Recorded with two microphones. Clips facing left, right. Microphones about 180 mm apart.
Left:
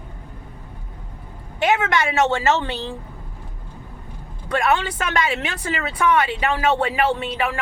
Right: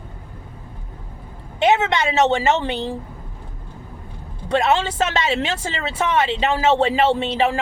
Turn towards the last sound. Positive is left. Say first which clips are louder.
# right 4 dB
turn(degrees=-25)  # may be behind; listen again after turning